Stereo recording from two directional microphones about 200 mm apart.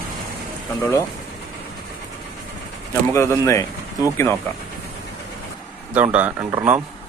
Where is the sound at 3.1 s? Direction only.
15° left (ahead or behind).